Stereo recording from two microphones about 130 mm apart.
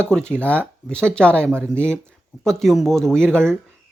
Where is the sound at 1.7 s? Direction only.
10° left (ahead or behind).